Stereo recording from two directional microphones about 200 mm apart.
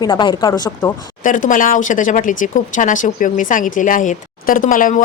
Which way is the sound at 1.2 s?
40° left (ahead or behind).